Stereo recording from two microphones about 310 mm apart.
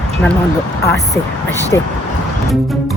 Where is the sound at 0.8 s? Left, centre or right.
Centre.